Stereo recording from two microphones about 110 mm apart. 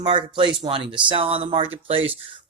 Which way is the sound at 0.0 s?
50° right (ahead or behind).